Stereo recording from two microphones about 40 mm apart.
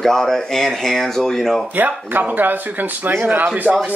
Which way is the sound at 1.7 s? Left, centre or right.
Right.